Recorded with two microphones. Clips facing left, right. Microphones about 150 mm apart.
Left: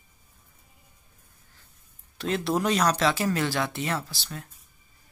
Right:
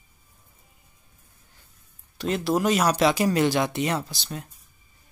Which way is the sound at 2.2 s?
Centre (ahead or behind).